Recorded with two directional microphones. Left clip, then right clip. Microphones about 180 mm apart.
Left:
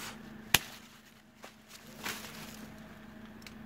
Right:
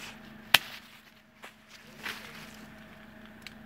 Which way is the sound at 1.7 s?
45° left (ahead or behind).